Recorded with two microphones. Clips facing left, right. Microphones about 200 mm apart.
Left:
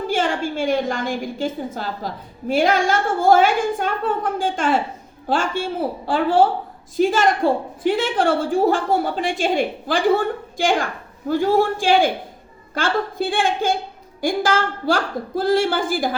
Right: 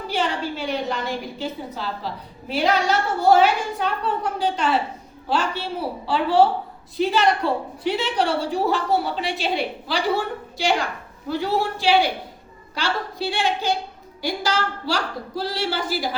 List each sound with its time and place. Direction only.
0.1 s a woman's voice: 45° left (ahead or behind)